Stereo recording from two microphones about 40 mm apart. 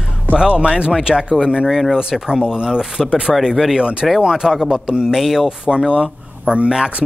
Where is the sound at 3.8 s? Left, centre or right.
Right.